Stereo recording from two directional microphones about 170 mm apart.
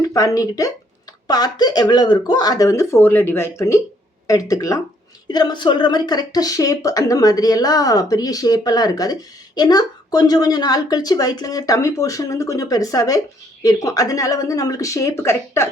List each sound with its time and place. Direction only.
0.1 s speech: 20° left (ahead or behind)